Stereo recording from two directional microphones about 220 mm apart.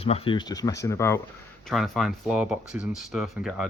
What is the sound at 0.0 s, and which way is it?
Speech, 25° left (ahead or behind).